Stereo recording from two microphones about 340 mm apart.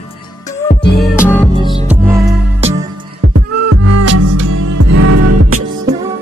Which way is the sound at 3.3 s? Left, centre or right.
Right.